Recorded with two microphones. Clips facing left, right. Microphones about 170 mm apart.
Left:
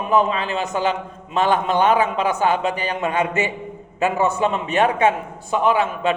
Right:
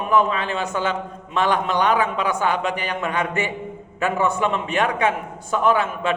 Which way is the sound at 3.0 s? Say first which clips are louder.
Left 4 dB; 20° left (ahead or behind).